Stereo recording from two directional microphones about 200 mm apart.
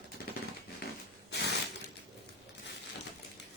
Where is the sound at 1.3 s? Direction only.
60° left (ahead or behind).